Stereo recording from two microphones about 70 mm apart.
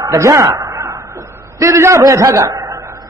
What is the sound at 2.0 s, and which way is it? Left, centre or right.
Speech, right.